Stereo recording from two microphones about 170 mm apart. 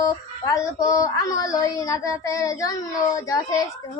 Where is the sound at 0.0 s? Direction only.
20° left (ahead or behind).